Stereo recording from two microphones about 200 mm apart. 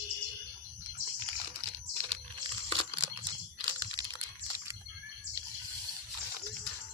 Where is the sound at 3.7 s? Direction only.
20° right (ahead or behind).